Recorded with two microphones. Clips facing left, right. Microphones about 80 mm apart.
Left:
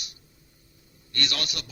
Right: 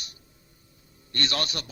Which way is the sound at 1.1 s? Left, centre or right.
Right.